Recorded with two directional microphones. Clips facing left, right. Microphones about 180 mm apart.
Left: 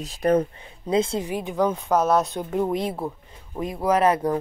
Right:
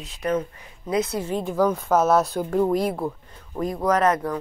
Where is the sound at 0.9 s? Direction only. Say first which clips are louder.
Left 2 dB; 25° left (ahead or behind).